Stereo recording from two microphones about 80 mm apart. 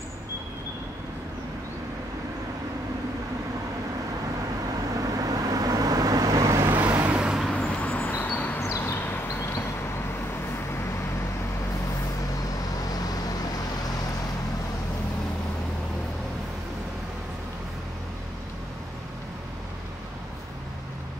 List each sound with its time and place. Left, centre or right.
4.9 s vehicle: right
6.7 s vehicle: right
7.2 s vehicle: centre
7.5 s vehicle: centre
8.5 s a sound: left
12.9 s vehicle: left